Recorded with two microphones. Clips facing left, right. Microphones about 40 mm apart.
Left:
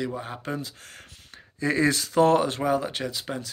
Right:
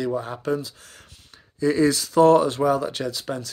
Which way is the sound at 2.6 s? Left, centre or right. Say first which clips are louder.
Right 4 dB; left.